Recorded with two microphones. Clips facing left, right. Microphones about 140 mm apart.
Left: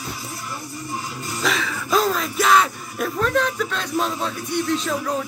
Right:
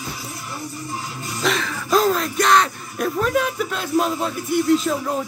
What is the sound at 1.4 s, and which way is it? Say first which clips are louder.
Speech: right 2 dB; centre (ahead or behind).